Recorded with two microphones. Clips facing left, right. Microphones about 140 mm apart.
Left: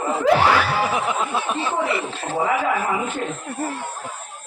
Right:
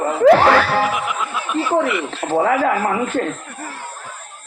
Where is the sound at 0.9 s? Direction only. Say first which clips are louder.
Left 1 dB; 30° left (ahead or behind).